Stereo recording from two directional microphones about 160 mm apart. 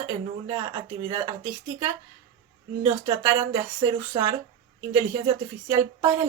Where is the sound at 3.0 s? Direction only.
30° right (ahead or behind).